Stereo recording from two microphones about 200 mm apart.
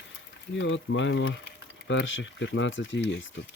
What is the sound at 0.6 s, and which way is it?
Speech, 70° left (ahead or behind).